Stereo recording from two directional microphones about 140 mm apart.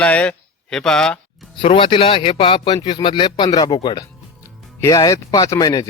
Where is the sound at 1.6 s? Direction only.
40° left (ahead or behind).